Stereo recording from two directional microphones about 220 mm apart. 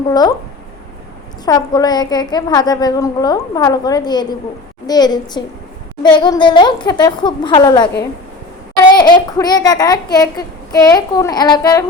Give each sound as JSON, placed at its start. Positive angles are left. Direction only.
{"t": 0.1, "sound": "a woman's voice", "side_deg": 15}
{"t": 1.5, "sound": "a woman's voice", "side_deg": 15}
{"t": 8.9, "sound": "a woman's voice", "side_deg": 20}